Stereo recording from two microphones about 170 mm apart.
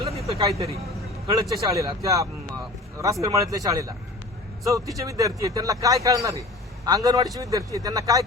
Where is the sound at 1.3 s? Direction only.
20° right (ahead or behind).